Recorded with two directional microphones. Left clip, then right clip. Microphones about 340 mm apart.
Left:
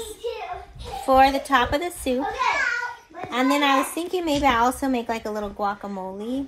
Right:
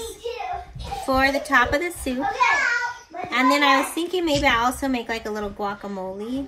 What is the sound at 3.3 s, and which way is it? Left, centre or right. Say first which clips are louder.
A woman's voice: right 3 dB; centre.